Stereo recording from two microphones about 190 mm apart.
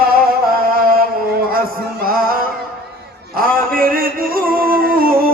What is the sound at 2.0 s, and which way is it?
Music, 50° right (ahead or behind).